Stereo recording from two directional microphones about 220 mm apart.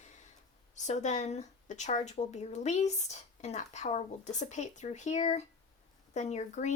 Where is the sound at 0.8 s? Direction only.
30° left (ahead or behind).